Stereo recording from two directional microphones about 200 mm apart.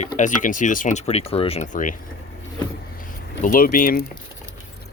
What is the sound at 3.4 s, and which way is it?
Speech, 45° left (ahead or behind).